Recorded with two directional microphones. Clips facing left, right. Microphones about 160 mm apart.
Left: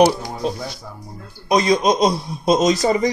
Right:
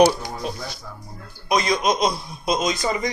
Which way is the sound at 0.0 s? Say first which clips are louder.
Left 2 dB; 30° left (ahead or behind).